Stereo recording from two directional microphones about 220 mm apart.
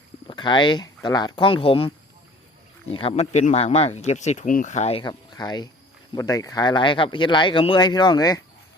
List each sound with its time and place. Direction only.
0.3 s speech: 20° left (ahead or behind)
3.0 s speech: 30° left (ahead or behind)